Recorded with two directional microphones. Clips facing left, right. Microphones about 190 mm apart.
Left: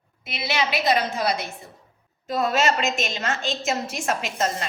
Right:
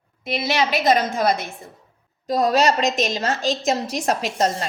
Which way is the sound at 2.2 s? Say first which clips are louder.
Right 4 dB; 35° right (ahead or behind).